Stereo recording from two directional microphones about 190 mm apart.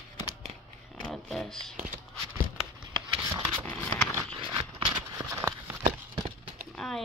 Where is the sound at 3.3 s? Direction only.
25° right (ahead or behind).